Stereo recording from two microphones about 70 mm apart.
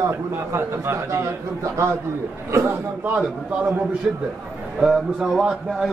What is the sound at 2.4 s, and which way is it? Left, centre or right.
Speech, right.